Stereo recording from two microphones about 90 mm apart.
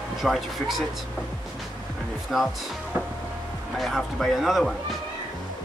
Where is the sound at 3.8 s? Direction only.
Centre (ahead or behind).